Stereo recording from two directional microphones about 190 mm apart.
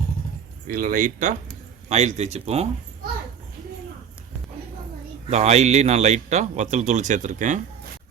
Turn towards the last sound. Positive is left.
turn(degrees=-40)  # may be behind; listen again after turning